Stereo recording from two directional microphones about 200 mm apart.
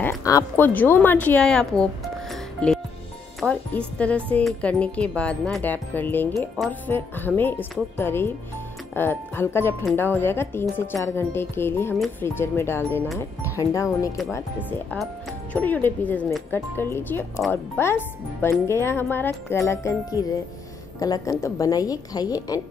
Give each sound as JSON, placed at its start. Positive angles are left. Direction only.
{"t": 0.2, "sound": "speech", "side_deg": 15}
{"t": 3.3, "sound": "speech", "side_deg": 5}